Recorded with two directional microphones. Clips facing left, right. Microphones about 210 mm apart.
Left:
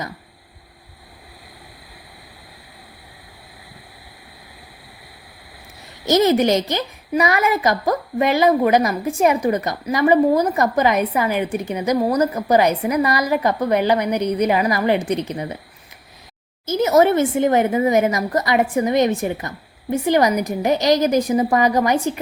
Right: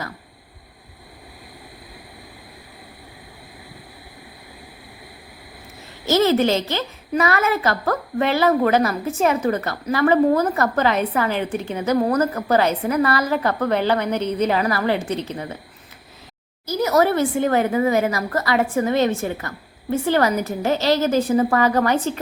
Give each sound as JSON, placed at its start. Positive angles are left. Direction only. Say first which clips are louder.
{"t": 6.1, "sound": "a woman's voice", "louder": "left 2 dB", "side_deg": 15}
{"t": 16.6, "sound": "a woman's voice", "louder": "left 3 dB", "side_deg": 20}